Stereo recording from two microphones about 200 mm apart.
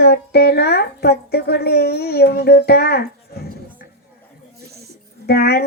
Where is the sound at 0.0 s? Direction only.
55° left (ahead or behind).